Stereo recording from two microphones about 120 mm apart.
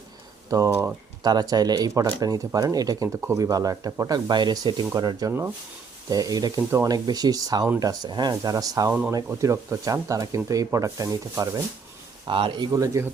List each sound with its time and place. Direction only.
0.5 s speech: 30° right (ahead or behind)
8.9 s speech: 15° right (ahead or behind)
9.1 s speech: 25° right (ahead or behind)
12.3 s speech: 45° right (ahead or behind)
12.7 s speech: 25° right (ahead or behind)